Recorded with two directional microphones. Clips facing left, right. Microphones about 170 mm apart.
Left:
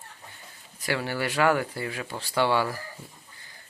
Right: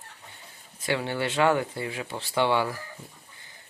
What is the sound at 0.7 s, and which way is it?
Speech, 20° right (ahead or behind).